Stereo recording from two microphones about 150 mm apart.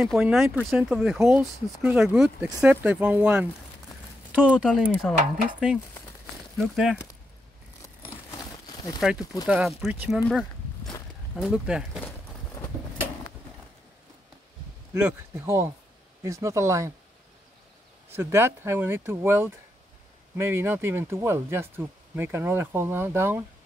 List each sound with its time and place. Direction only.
0.0 s speech: centre (ahead or behind)
1.2 s speech: 15° right (ahead or behind)
4.5 s speech: 5° right (ahead or behind)
8.1 s crumpling: 20° left (ahead or behind)
9.2 s speech: 25° left (ahead or behind)
9.5 s speech: centre (ahead or behind)
11.3 s speech: 5° right (ahead or behind)
15.0 s speech: 15° right (ahead or behind)
18.1 s speech: 15° right (ahead or behind)